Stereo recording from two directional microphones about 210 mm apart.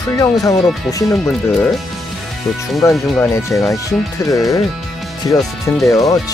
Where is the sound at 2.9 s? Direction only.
5° left (ahead or behind).